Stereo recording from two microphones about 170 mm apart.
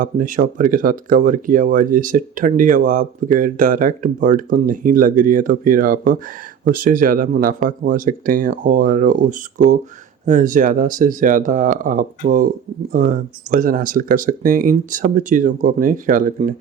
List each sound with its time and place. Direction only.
0.0 s speech: 50° right (ahead or behind)